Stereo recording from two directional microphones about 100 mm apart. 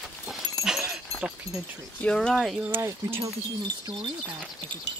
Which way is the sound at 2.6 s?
25° right (ahead or behind).